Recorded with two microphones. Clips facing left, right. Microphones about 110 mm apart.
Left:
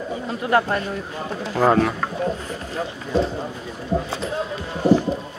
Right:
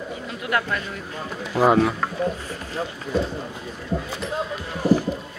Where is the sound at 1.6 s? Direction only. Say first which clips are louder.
Even; 10° right (ahead or behind).